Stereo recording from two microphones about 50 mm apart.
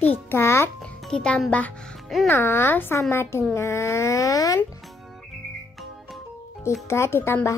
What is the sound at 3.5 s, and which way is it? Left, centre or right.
Speech, left.